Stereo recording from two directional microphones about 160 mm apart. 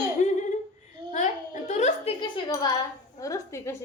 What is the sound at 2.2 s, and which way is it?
A woman's voice, 30° left (ahead or behind).